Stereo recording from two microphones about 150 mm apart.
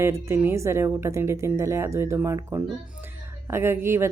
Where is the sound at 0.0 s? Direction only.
20° right (ahead or behind).